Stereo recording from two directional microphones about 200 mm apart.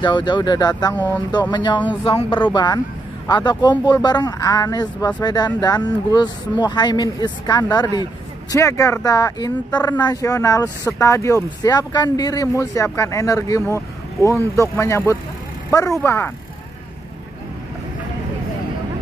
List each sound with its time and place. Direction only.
0.0 s speech: 25° left (ahead or behind)